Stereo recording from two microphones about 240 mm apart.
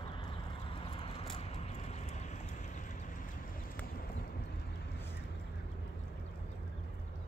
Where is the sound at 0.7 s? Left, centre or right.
Left.